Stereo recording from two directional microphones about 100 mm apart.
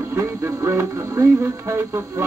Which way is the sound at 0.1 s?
25° right (ahead or behind).